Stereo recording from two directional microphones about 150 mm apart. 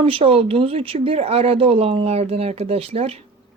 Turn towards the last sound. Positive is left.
turn(degrees=-40)  # may be behind; listen again after turning